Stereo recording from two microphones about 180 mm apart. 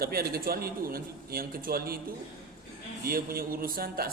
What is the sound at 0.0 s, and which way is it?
Speech, 55° right (ahead or behind).